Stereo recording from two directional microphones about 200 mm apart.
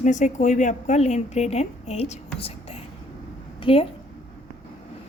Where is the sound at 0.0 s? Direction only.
40° left (ahead or behind).